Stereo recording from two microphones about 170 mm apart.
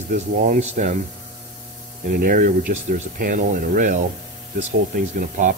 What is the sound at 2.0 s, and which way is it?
Speech, 55° right (ahead or behind).